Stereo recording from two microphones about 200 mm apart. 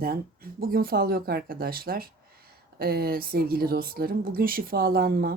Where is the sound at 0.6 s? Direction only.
50° right (ahead or behind).